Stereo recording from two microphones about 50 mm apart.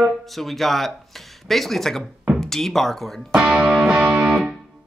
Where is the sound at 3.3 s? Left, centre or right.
Right.